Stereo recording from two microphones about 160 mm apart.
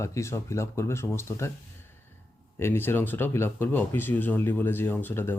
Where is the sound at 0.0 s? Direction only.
20° left (ahead or behind).